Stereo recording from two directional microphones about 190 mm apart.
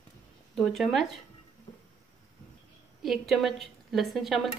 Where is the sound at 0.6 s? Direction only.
Centre (ahead or behind).